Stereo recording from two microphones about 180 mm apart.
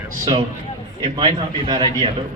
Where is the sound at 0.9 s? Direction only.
25° right (ahead or behind).